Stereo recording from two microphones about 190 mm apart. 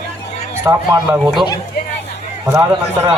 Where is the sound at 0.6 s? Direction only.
15° right (ahead or behind).